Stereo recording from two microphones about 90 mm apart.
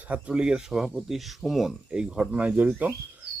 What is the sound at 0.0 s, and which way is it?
Speech, 15° right (ahead or behind).